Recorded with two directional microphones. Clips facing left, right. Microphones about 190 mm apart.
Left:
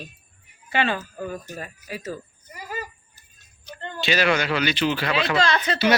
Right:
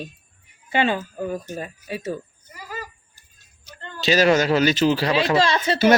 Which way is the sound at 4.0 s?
40° right (ahead or behind).